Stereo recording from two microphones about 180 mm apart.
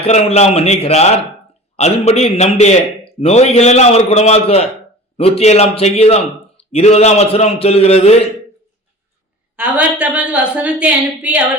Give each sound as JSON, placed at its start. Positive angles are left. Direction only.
{"t": 0.0, "sound": "a man's voice", "side_deg": 35}
{"t": 9.6, "sound": "a woman's voice", "side_deg": -5}